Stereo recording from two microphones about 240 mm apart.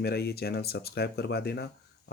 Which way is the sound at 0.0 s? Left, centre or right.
Left.